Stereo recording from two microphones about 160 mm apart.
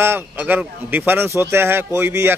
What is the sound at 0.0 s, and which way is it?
A man's voice, 15° right (ahead or behind).